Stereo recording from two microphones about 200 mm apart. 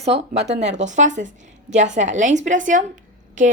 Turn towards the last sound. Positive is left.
turn(degrees=-40)  # may be behind; listen again after turning